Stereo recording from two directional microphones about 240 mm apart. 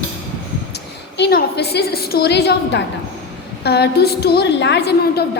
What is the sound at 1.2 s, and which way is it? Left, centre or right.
A woman's voice, left.